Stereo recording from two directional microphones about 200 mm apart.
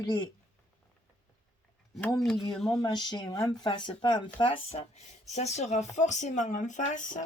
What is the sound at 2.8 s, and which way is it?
Speech, 20° left (ahead or behind).